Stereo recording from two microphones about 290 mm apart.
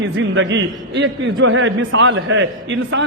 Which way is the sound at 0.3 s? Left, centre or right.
Right.